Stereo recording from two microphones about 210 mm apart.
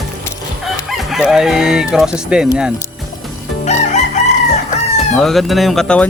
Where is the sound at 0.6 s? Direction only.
Centre (ahead or behind).